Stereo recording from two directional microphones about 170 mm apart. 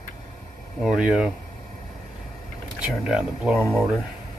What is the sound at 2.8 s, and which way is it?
Speech, 5° right (ahead or behind).